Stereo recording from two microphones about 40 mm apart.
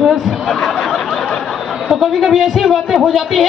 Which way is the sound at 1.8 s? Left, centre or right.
Centre.